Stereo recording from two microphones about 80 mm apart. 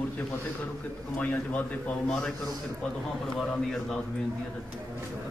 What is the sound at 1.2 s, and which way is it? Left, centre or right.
Speech, left.